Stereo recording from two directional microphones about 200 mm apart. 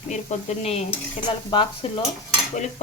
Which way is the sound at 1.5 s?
25° left (ahead or behind).